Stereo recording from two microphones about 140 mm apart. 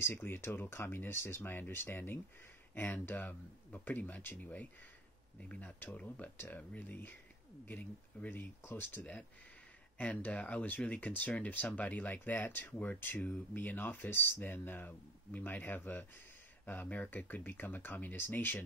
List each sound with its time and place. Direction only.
0.0 s speech: 15° left (ahead or behind)